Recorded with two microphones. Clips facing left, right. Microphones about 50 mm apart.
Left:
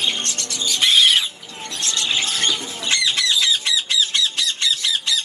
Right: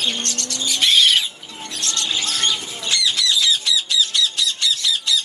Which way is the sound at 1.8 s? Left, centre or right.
Left.